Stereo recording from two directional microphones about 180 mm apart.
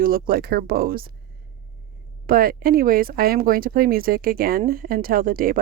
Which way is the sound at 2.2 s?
55° right (ahead or behind).